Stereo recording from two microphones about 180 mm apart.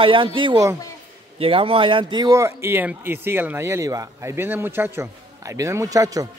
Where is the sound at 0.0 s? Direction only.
30° right (ahead or behind).